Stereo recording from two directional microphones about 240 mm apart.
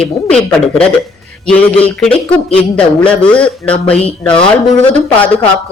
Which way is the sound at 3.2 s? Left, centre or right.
Centre.